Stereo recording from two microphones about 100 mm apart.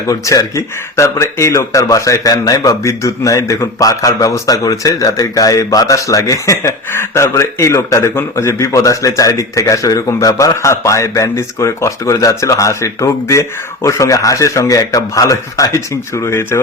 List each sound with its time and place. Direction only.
0.1 s speech: 35° left (ahead or behind)